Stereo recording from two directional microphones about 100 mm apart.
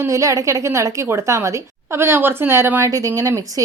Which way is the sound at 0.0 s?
30° right (ahead or behind).